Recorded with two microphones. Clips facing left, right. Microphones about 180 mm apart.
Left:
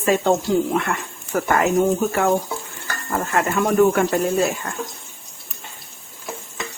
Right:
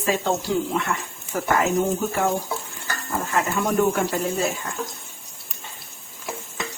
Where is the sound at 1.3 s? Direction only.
65° left (ahead or behind).